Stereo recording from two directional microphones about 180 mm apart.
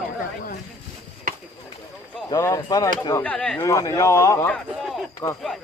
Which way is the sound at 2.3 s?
15° left (ahead or behind).